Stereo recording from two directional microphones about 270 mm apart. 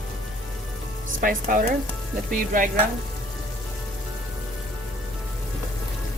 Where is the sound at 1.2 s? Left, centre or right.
Right.